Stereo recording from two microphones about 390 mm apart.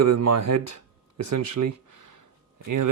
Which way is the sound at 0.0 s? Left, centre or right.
Right.